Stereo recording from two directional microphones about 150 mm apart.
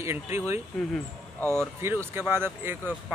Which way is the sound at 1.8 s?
15° right (ahead or behind).